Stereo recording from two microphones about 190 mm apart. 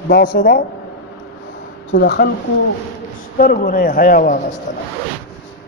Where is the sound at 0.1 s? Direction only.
55° left (ahead or behind).